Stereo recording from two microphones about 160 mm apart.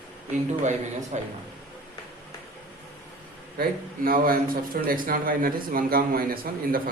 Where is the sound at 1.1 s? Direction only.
45° right (ahead or behind).